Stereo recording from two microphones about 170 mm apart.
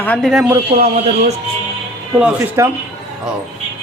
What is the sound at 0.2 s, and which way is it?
Speech, centre (ahead or behind).